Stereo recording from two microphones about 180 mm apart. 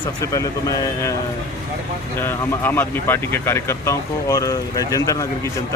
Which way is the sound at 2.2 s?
10° left (ahead or behind).